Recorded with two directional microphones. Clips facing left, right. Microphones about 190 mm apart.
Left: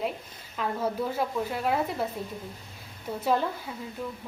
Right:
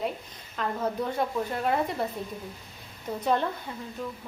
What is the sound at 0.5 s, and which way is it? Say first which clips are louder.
A woman's voice: even; 5° left (ahead or behind).